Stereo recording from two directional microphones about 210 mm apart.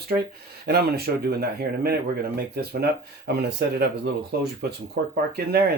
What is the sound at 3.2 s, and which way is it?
Speech, 50° right (ahead or behind).